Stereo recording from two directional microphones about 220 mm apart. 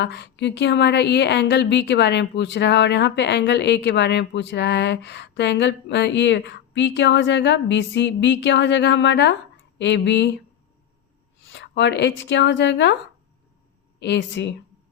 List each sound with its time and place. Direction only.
0.0 s speech: 55° left (ahead or behind)
11.5 s speech: 55° left (ahead or behind)
14.0 s speech: 55° left (ahead or behind)